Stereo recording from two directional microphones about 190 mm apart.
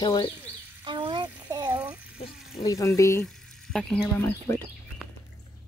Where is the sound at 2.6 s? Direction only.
15° left (ahead or behind).